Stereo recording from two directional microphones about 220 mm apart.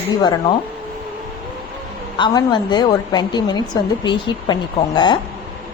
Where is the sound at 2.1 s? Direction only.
20° left (ahead or behind).